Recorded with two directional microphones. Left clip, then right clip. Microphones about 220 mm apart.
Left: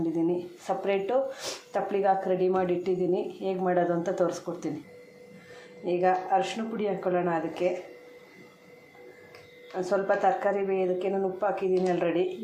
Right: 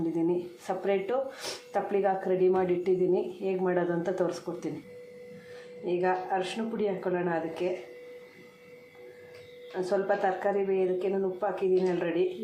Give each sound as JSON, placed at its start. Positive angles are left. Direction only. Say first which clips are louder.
{"t": 0.9, "sound": "speech", "louder": "left 2 dB", "side_deg": 0}
{"t": 5.8, "sound": "speech", "louder": "left 3 dB", "side_deg": 10}
{"t": 9.7, "sound": "speech", "louder": "left 2 dB", "side_deg": 10}